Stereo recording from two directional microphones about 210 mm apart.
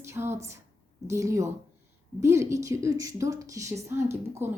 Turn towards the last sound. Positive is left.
turn(degrees=-10)  # may be behind; listen again after turning